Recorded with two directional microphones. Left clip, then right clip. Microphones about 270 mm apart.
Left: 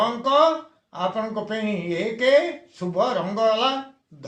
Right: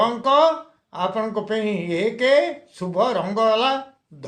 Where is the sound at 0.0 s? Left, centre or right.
Right.